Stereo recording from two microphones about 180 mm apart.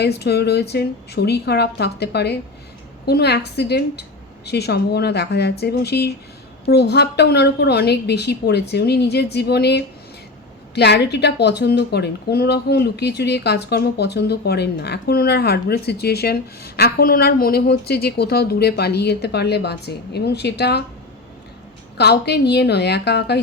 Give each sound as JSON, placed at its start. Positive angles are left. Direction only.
{"t": 0.0, "sound": "a woman's voice", "side_deg": 65}
{"t": 21.9, "sound": "a woman's voice", "side_deg": 65}